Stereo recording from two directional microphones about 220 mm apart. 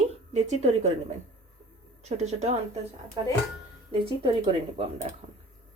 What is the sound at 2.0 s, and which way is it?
Speech, 30° right (ahead or behind).